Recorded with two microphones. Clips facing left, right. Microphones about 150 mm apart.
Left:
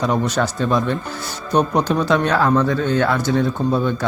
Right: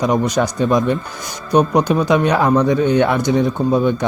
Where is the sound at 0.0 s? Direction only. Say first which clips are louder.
Right 3 dB; 10° right (ahead or behind).